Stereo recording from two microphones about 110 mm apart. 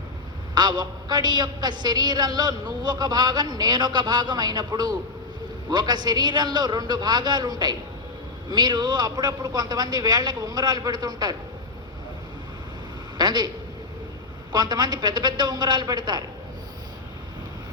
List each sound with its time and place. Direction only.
0.5 s a woman's voice: 40° right (ahead or behind)
13.1 s a sound: 40° right (ahead or behind)
14.5 s a woman's voice: 40° right (ahead or behind)